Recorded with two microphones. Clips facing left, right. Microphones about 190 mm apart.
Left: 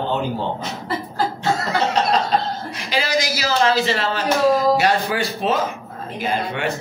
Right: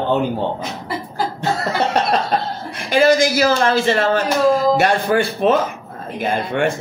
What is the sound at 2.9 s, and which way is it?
A man's voice, 50° right (ahead or behind).